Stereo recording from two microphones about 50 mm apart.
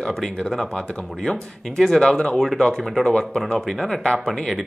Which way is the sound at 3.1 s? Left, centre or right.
Centre.